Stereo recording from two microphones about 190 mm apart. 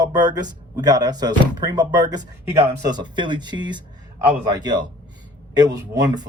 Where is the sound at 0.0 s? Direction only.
20° right (ahead or behind).